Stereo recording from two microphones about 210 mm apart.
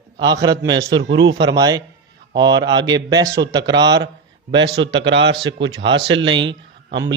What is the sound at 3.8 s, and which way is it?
A man's voice, 55° right (ahead or behind).